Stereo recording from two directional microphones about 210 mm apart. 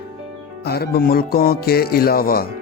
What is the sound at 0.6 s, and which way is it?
Speech, 50° left (ahead or behind).